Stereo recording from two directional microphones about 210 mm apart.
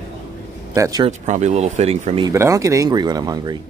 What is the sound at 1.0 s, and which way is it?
Speech, 35° right (ahead or behind).